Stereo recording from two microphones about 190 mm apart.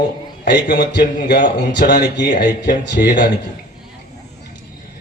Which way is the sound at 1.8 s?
60° left (ahead or behind).